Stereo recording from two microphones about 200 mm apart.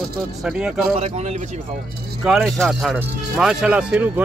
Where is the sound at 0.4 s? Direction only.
5° right (ahead or behind).